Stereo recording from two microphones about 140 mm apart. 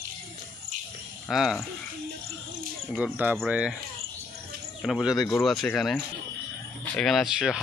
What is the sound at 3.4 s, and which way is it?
Speech, 10° right (ahead or behind).